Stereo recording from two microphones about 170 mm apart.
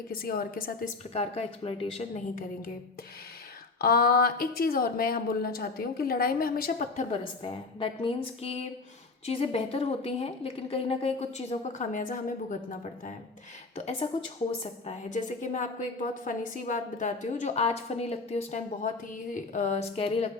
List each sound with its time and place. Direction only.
0.1 s speech: 60° left (ahead or behind)
1.1 s a woman's voice: 40° left (ahead or behind)
3.8 s a woman's voice: 60° left (ahead or behind); by 20.3 s 35° left (ahead or behind)